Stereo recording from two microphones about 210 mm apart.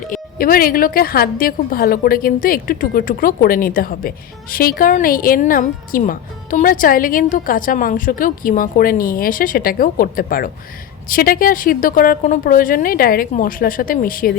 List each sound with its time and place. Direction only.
0.1 s a woman's voice: 45° left (ahead or behind)